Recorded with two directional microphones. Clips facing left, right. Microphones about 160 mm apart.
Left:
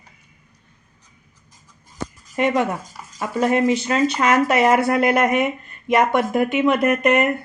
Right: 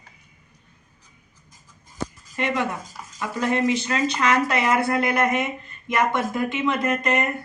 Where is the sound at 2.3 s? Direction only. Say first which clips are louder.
Left 6 dB; 50° left (ahead or behind).